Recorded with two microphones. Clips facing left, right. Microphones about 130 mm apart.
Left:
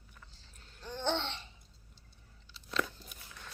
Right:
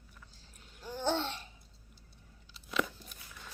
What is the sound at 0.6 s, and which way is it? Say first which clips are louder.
Babbling: right 1 dB; 10° right (ahead or behind).